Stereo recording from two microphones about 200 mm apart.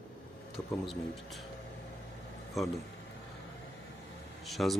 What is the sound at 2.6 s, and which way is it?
Speech, centre (ahead or behind).